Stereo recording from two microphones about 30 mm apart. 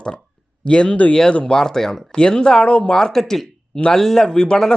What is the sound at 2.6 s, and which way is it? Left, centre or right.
Speech, left.